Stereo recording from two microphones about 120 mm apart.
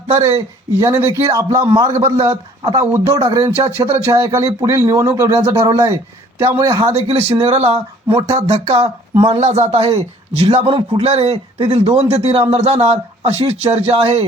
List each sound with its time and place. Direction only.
0.2 s speech: 25° right (ahead or behind)
6.9 s speech: 60° right (ahead or behind)